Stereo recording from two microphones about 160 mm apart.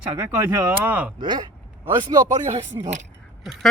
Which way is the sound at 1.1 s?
25° right (ahead or behind).